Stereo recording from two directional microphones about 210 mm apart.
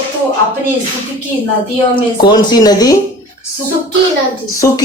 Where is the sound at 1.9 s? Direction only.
20° left (ahead or behind).